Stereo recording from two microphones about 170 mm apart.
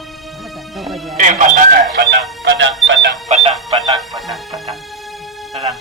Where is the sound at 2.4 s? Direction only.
90° right.